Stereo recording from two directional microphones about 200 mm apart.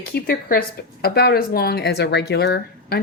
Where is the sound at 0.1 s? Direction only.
50° left (ahead or behind).